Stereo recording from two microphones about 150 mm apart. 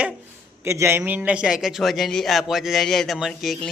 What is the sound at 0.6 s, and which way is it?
A man's voice, 15° right (ahead or behind).